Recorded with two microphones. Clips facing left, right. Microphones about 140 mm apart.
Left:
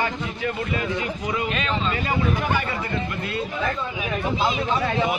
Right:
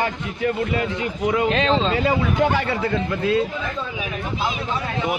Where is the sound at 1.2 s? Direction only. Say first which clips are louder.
Right 9 dB; 90° right.